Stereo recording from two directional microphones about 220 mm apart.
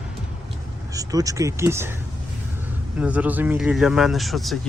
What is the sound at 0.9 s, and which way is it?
Speech, 15° right (ahead or behind).